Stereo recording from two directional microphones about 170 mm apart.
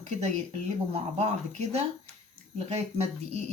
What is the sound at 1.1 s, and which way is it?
Speech, 40° right (ahead or behind).